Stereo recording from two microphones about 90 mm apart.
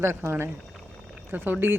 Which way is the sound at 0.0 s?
30° right (ahead or behind).